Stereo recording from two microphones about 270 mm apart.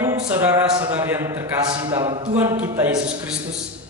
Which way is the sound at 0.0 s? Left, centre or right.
Centre.